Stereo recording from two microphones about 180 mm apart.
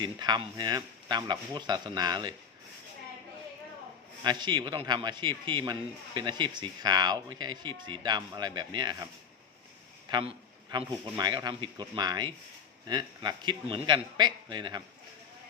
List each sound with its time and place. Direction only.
0.0 s speech: 25° right (ahead or behind)
4.2 s speech: 25° right (ahead or behind)
10.1 s speech: 25° right (ahead or behind)